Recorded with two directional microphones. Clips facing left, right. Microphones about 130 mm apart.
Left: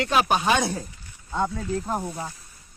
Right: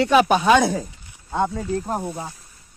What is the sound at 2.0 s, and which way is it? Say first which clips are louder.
Speech: right 2 dB; 15° right (ahead or behind).